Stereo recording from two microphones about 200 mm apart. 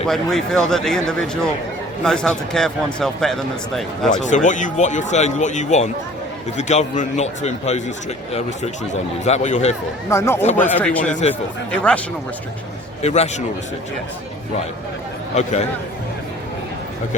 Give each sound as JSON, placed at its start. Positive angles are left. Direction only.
{"t": 0.1, "sound": "speech", "side_deg": 0}
{"t": 4.1, "sound": "speech", "side_deg": 40}
{"t": 10.1, "sound": "speech", "side_deg": 15}
{"t": 11.1, "sound": "speech", "side_deg": 35}
{"t": 11.7, "sound": "speech", "side_deg": 5}
{"t": 13.0, "sound": "speech", "side_deg": 35}